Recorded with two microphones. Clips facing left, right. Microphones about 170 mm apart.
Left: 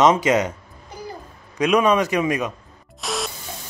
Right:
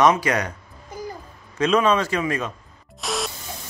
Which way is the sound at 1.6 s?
15° left (ahead or behind).